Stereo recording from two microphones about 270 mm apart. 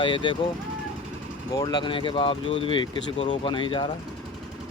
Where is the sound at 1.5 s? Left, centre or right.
Centre.